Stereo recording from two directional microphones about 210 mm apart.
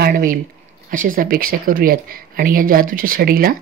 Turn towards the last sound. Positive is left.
turn(degrees=-45)  # may be behind; listen again after turning